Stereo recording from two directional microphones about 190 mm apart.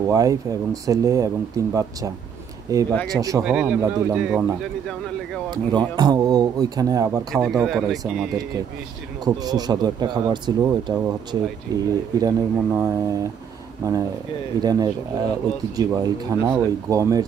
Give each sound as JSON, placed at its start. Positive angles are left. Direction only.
{"t": 0.0, "sound": "speech", "side_deg": -15}
{"t": 3.4, "sound": "speech", "side_deg": -5}
{"t": 3.8, "sound": "speech", "side_deg": -15}
{"t": 5.5, "sound": "speech", "side_deg": -20}
{"t": 7.3, "sound": "speech", "side_deg": -5}
{"t": 9.2, "sound": "speech", "side_deg": -20}
{"t": 14.6, "sound": "speech", "side_deg": -20}